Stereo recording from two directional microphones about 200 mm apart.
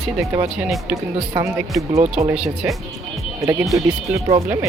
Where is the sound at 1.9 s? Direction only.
30° right (ahead or behind).